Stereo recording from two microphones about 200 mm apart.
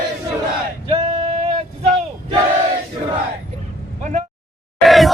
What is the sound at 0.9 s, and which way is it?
Male singing, 25° right (ahead or behind).